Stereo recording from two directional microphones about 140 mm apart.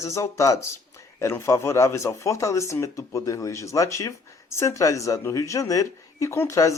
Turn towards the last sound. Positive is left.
turn(degrees=20)  # may be behind; listen again after turning